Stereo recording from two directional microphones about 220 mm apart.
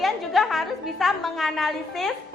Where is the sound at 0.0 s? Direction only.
Centre (ahead or behind).